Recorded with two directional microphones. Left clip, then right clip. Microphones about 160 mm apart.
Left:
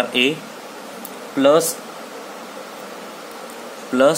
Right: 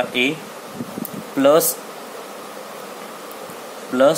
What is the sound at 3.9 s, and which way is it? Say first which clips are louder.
Speech: even; 15° left (ahead or behind).